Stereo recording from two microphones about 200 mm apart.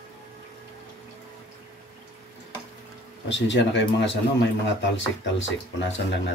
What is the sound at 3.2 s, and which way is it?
Speech, 65° left (ahead or behind).